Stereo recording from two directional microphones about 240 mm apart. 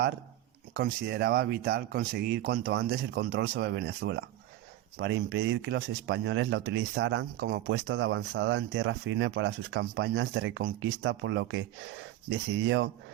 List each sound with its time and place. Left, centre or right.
0.8 s speech: right